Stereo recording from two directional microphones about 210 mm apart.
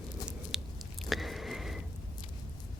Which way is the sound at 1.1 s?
Centre (ahead or behind).